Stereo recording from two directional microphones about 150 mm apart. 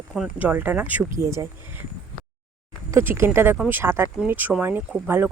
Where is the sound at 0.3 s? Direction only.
10° right (ahead or behind).